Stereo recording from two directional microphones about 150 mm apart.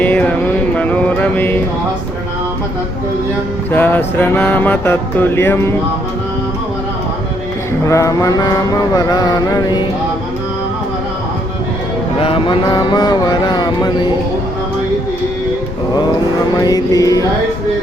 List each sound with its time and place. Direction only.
0.0 s a sound: 10° left (ahead or behind)
0.8 s mantra: 10° left (ahead or behind)
3.7 s music: 15° left (ahead or behind)
7.9 s mantra: 20° left (ahead or behind)
12.2 s mantra: 35° left (ahead or behind)
16.6 s mantra: 25° left (ahead or behind)